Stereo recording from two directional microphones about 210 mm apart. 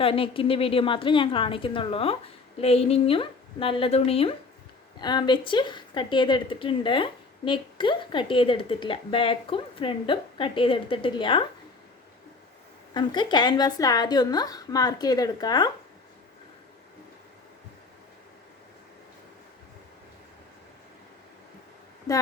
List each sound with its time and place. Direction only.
0.0 s a woman's voice: 25° left (ahead or behind)
12.9 s a woman's voice: 20° left (ahead or behind)